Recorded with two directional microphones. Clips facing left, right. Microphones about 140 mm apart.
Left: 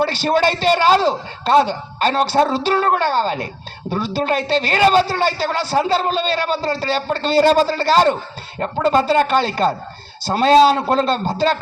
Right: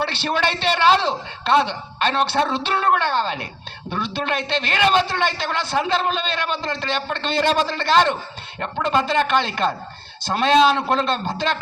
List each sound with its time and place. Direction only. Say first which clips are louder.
0.0 s a man's voice: left 6 dB; 40° left (ahead or behind)